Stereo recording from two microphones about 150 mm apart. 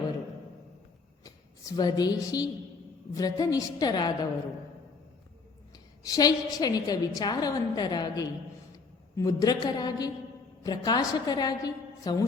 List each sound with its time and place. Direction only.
1.2 s a woman's voice: 25° left (ahead or behind)
5.7 s a woman's voice: 25° left (ahead or behind)